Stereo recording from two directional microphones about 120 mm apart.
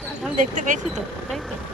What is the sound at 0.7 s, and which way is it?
Speech, 90° right.